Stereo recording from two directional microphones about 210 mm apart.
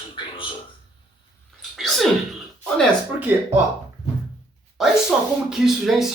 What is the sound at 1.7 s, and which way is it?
Sneeze, centre (ahead or behind).